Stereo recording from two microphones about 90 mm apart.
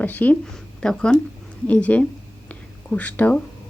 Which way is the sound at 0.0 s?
20° left (ahead or behind).